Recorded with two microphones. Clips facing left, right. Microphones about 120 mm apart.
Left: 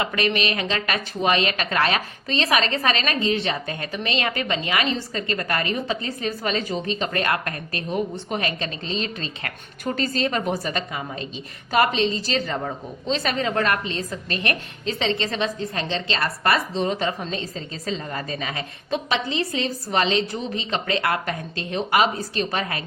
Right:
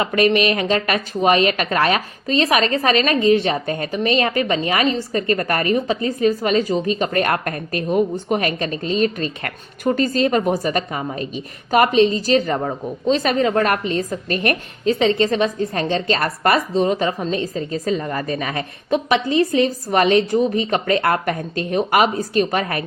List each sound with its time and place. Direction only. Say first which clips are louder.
0.0 s a woman's voice: right 7 dB; 35° right (ahead or behind)
7.9 s a woman's voice: right 8 dB; 45° right (ahead or behind)